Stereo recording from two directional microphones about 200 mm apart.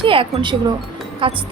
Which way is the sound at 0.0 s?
25° right (ahead or behind).